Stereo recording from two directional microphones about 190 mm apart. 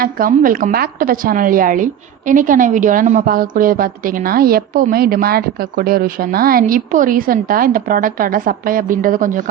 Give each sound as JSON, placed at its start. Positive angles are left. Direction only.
{"t": 0.0, "sound": "a woman's voice", "side_deg": -50}